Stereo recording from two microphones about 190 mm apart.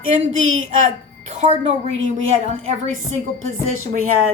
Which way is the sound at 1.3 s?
35° right (ahead or behind).